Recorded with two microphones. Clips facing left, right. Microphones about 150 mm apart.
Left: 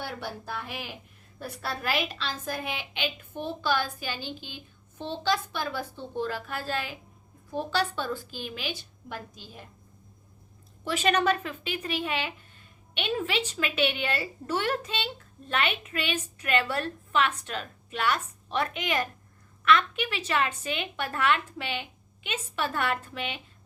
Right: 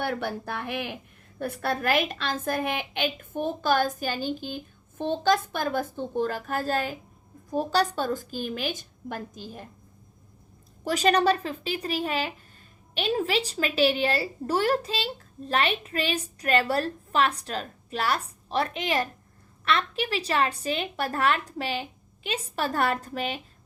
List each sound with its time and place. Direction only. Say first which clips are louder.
0.0 s a woman's voice: right 7 dB; 60° right (ahead or behind)
10.8 s a woman's voice: right 3 dB; 40° right (ahead or behind)